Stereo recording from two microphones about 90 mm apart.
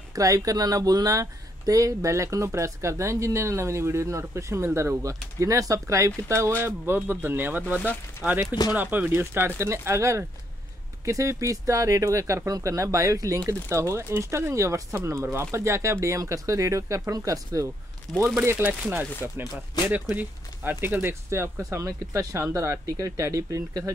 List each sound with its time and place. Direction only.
0.1 s a man's voice: 40° right (ahead or behind)
18.3 s a man's voice: 30° right (ahead or behind)
18.6 s speech: 15° right (ahead or behind); by 23.9 s 35° right (ahead or behind)